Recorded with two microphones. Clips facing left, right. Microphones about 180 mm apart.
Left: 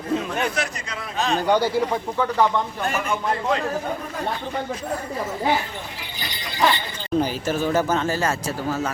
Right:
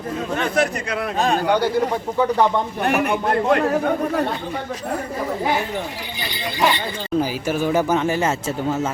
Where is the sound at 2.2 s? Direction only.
15° right (ahead or behind).